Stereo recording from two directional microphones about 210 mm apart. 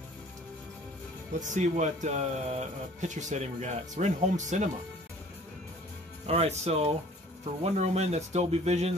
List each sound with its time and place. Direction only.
1.5 s speech: 35° right (ahead or behind)
6.2 s speech: 30° right (ahead or behind)